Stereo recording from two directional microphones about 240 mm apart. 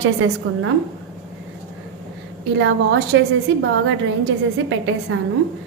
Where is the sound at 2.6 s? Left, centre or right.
Right.